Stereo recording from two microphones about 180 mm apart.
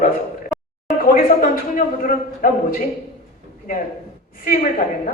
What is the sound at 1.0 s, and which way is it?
A man's voice, 50° left (ahead or behind).